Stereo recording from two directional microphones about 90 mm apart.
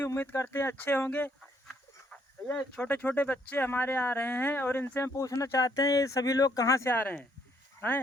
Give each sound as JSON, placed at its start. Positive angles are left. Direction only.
{"t": 0.0, "sound": "speech", "side_deg": 30}
{"t": 2.5, "sound": "speech", "side_deg": 15}